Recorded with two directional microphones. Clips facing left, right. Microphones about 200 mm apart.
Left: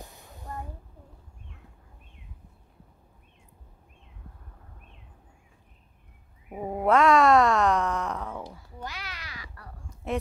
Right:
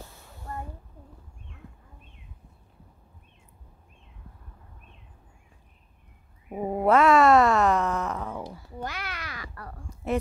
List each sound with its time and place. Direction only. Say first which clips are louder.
0.0 s a sound: even; 15° left (ahead or behind)
6.5 s groan: right 2 dB; 5° right (ahead or behind)
8.7 s babbling: right 5 dB; 55° right (ahead or behind)